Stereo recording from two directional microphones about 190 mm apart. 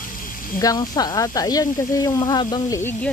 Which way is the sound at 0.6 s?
20° left (ahead or behind).